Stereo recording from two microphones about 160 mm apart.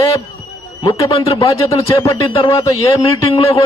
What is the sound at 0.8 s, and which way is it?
Speech, 25° left (ahead or behind).